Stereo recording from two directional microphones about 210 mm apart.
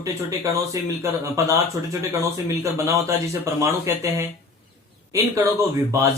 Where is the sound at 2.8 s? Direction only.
15° right (ahead or behind).